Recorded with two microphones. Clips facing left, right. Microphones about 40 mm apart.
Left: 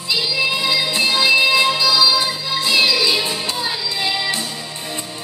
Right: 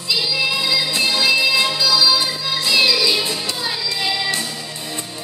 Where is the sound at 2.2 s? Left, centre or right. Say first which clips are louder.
Left 1 dB; left.